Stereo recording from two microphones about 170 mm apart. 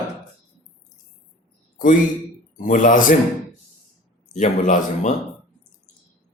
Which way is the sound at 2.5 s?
50° left (ahead or behind).